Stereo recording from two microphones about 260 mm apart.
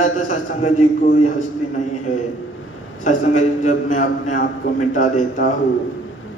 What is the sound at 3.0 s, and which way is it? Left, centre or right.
A man's voice, left.